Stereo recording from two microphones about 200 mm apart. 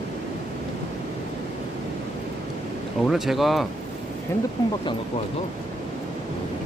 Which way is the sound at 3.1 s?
Centre (ahead or behind).